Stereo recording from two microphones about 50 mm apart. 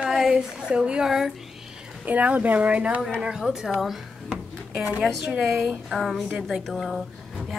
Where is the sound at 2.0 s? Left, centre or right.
Right.